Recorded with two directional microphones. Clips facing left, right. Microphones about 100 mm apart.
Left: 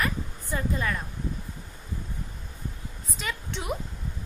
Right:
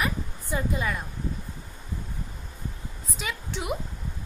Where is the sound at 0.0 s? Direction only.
10° right (ahead or behind).